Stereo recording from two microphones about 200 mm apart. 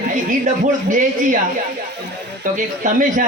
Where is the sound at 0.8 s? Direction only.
40° right (ahead or behind).